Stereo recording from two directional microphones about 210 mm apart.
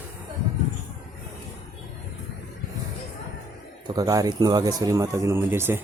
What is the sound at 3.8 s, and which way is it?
Speech, 20° right (ahead or behind).